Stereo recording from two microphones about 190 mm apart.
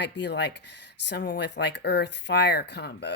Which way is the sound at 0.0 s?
65° left (ahead or behind).